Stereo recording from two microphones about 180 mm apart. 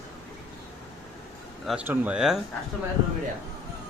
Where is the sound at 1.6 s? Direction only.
5° right (ahead or behind).